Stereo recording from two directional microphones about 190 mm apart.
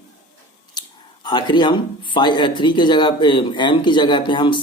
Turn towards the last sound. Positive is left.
turn(degrees=25)  # may be behind; listen again after turning